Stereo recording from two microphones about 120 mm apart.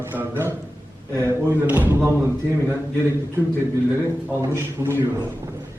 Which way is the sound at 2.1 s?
25° right (ahead or behind).